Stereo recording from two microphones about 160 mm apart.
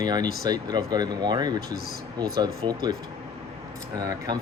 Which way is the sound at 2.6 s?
30° right (ahead or behind).